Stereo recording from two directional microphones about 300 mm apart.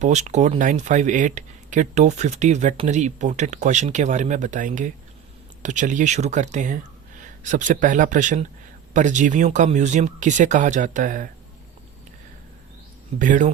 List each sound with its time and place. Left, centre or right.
0.0 s speech: right
13.1 s speech: right